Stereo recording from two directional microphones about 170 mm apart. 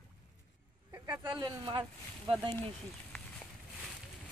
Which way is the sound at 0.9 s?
15° right (ahead or behind).